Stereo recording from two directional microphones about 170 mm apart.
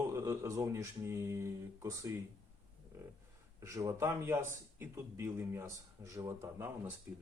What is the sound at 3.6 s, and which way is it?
A man's voice, 20° right (ahead or behind).